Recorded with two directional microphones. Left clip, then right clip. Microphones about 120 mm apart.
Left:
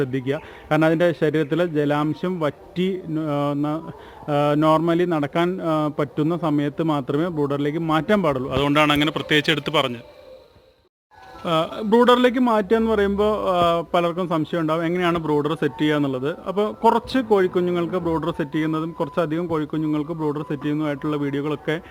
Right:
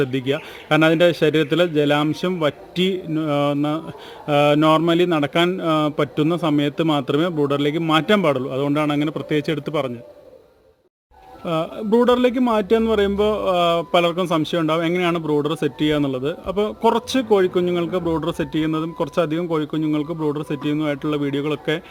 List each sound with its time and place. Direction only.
0.0 s speech: 10° right (ahead or behind)
11.4 s speech: centre (ahead or behind)
12.6 s speech: 20° right (ahead or behind)
15.2 s speech: centre (ahead or behind)
15.4 s speech: 20° right (ahead or behind)
18.0 s speech: 5° right (ahead or behind)
18.3 s speech: 15° right (ahead or behind)